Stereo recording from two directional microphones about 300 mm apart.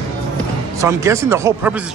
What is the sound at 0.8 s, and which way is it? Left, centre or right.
Speech, centre.